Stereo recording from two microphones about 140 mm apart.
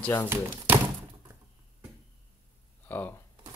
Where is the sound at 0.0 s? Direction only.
15° left (ahead or behind).